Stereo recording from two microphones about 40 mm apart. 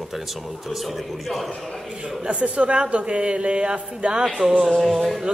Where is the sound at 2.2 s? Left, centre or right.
Right.